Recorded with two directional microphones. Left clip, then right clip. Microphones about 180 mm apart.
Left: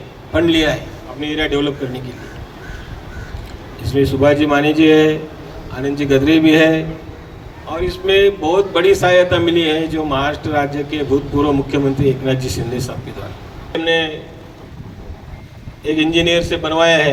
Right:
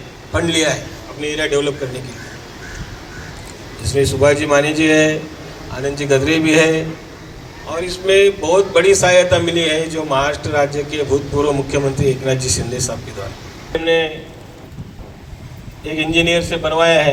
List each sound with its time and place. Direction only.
0.5 s speech: 45° left (ahead or behind)
4.0 s speech: 45° left (ahead or behind)
15.9 s speech: 45° left (ahead or behind)